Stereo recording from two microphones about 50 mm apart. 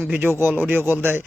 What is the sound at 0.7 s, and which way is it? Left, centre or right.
Speech, right.